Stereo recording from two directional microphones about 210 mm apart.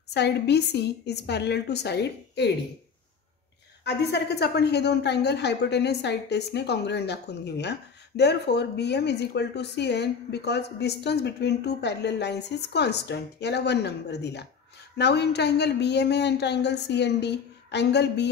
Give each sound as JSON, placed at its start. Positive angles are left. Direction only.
{"t": 0.1, "sound": "speech", "side_deg": 55}
{"t": 3.8, "sound": "speech", "side_deg": 50}